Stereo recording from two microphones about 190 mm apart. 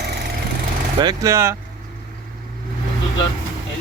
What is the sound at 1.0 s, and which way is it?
Speech, 15° right (ahead or behind).